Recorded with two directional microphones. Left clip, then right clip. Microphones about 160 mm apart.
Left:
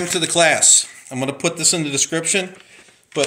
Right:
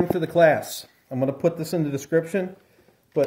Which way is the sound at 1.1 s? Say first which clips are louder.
Even; 40° right (ahead or behind).